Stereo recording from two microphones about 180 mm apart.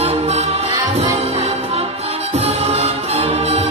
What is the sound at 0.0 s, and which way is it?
Music, 35° right (ahead or behind).